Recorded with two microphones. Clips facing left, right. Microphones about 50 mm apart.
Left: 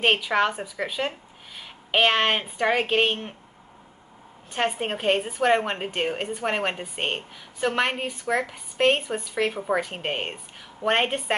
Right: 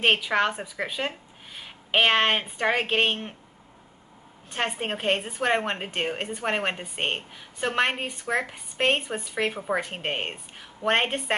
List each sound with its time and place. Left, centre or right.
0.0 s a woman's voice: centre
4.5 s a woman's voice: centre